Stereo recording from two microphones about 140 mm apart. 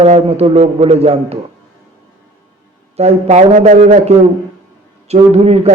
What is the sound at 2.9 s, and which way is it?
A man's voice, 50° right (ahead or behind).